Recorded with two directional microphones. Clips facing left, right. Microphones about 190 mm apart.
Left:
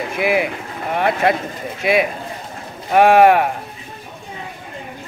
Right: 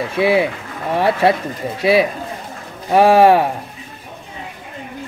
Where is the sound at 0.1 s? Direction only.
30° right (ahead or behind).